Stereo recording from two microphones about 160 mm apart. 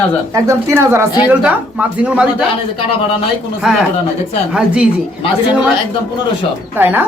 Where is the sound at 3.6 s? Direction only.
5° right (ahead or behind).